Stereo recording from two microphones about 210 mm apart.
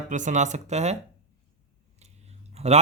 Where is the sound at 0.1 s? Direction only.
35° right (ahead or behind).